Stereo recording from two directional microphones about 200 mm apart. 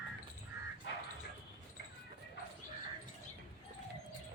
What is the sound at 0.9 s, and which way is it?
Dog, 65° left (ahead or behind).